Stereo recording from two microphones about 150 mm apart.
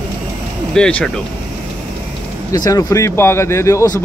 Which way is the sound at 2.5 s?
25° left (ahead or behind).